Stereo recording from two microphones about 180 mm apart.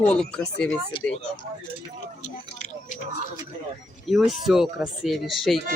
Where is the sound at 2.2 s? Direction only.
45° left (ahead or behind).